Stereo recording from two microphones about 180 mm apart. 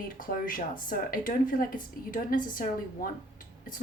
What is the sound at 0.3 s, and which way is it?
Speech, 50° left (ahead or behind).